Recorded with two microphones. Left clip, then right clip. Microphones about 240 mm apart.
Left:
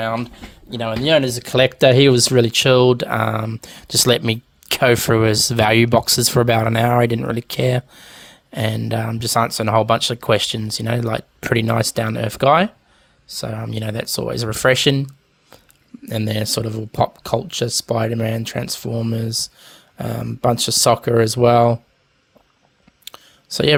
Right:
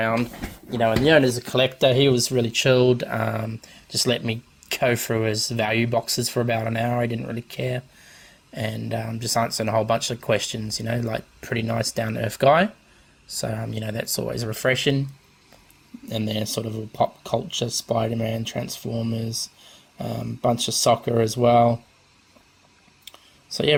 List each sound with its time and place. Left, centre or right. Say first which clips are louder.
0.7 s speech: left 1 dB; left; by 13.7 s centre
13.7 s speech: left 4 dB; left
16.0 s speech: left 5 dB; left
23.0 s clicking: left 6 dB; left